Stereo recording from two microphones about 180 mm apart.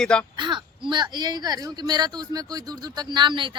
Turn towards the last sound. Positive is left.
turn(degrees=-25)  # may be behind; listen again after turning